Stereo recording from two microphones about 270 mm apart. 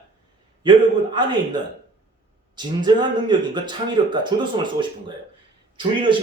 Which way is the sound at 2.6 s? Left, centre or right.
Centre.